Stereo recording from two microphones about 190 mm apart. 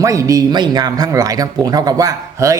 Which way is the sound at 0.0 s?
15° right (ahead or behind).